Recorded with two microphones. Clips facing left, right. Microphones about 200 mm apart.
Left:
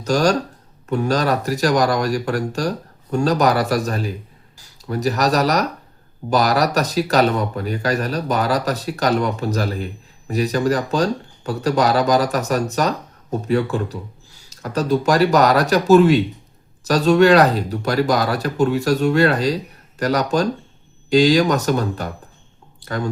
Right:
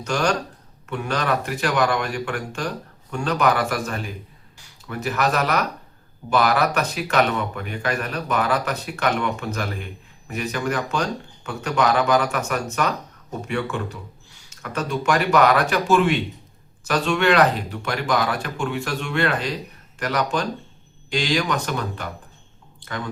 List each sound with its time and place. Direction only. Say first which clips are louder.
0.0 s speech: left 5 dB; 35° left (ahead or behind)